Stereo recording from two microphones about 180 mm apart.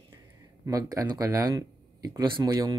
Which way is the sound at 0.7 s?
20° right (ahead or behind).